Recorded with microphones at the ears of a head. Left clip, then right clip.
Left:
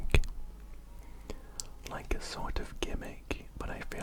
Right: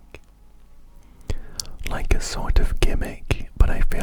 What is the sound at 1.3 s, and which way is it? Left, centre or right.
Speech, right.